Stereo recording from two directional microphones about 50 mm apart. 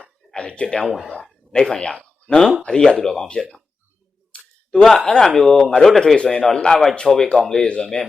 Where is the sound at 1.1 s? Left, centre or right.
Centre.